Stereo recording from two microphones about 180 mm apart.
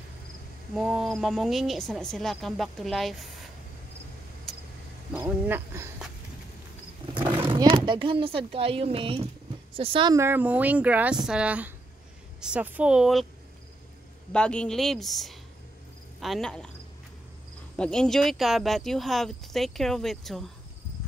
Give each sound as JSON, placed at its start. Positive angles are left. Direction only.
{"t": 0.7, "sound": "speech", "side_deg": 0}
{"t": 4.5, "sound": "vehicle", "side_deg": 0}
{"t": 5.1, "sound": "speech", "side_deg": -10}
{"t": 7.2, "sound": "speech", "side_deg": -25}
{"t": 10.1, "sound": "speech", "side_deg": -10}
{"t": 14.3, "sound": "speech", "side_deg": 5}
{"t": 17.7, "sound": "speech", "side_deg": 5}